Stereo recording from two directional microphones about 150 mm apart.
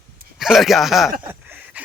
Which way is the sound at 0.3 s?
Centre (ahead or behind).